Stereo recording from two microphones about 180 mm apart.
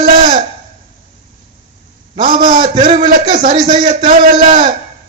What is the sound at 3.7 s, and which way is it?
Speech, 25° right (ahead or behind).